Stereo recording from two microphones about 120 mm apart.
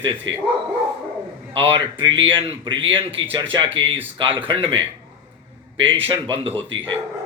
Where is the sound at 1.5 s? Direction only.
50° right (ahead or behind).